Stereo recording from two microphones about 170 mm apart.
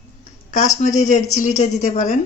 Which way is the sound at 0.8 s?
45° left (ahead or behind).